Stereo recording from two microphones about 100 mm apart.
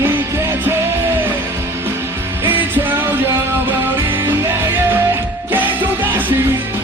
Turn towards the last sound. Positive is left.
turn(degrees=-20)  # may be behind; listen again after turning